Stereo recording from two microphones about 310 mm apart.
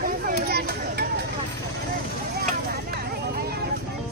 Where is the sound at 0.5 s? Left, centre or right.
Right.